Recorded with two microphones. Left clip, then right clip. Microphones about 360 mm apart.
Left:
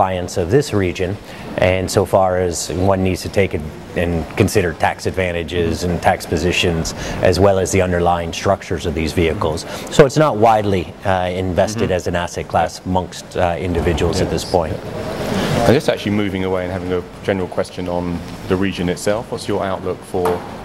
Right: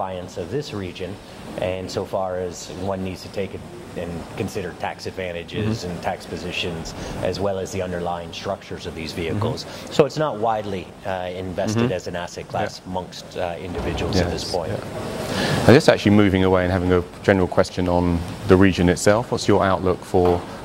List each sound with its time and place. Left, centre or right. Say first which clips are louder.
0.0 s speech: left 10 dB; left
15.7 s speech: right 2 dB; right